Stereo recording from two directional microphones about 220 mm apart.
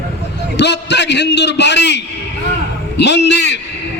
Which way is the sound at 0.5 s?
50° left (ahead or behind).